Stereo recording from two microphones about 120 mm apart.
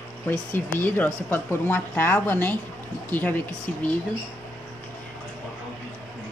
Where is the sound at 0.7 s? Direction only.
15° left (ahead or behind).